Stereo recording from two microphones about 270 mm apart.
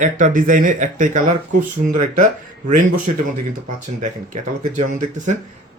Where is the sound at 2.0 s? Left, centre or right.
Right.